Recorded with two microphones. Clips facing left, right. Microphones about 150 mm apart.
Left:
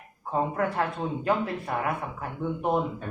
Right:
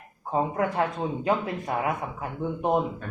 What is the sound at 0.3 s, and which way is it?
Speech, 20° right (ahead or behind).